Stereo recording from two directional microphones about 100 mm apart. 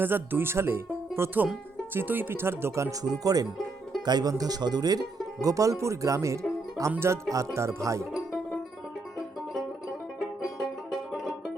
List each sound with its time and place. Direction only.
0.0 s speech: 20° right (ahead or behind)
3.0 s speech: 40° right (ahead or behind)
11.1 s music: centre (ahead or behind)